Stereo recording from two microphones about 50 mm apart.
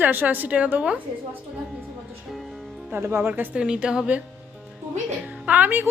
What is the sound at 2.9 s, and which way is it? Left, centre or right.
Speech, right.